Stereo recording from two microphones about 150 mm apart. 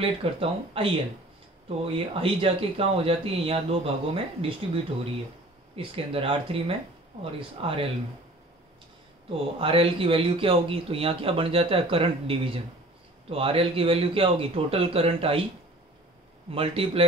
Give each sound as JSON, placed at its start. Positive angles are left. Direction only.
{"t": 0.0, "sound": "speech", "side_deg": -40}
{"t": 5.8, "sound": "speech", "side_deg": -40}
{"t": 9.6, "sound": "speech", "side_deg": -40}
{"t": 16.4, "sound": "speech", "side_deg": -40}